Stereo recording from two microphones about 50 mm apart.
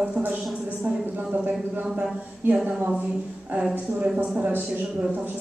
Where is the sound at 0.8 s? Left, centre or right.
Right.